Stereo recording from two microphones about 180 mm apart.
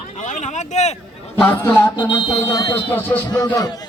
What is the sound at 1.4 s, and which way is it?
A man's voice, 10° left (ahead or behind).